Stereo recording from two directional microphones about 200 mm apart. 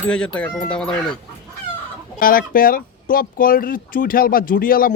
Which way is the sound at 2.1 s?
45° left (ahead or behind).